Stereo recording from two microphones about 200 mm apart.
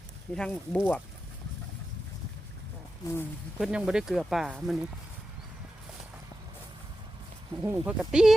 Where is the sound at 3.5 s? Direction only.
5° right (ahead or behind).